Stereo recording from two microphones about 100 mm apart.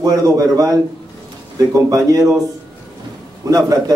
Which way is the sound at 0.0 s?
35° right (ahead or behind).